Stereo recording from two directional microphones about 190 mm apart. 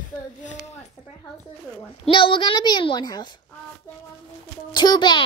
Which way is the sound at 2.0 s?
25° left (ahead or behind).